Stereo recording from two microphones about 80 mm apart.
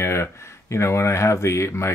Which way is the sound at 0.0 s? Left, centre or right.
Left.